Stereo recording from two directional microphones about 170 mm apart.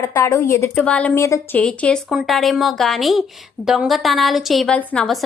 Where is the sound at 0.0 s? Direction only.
15° left (ahead or behind).